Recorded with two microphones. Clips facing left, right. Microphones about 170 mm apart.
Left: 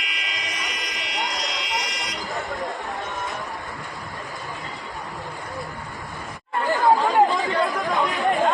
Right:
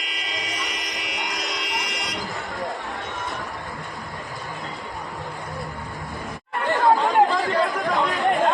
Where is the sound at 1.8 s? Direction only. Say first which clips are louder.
Even; 60° right (ahead or behind).